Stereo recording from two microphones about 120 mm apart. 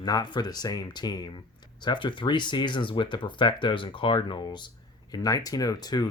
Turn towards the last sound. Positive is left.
turn(degrees=35)  # may be behind; listen again after turning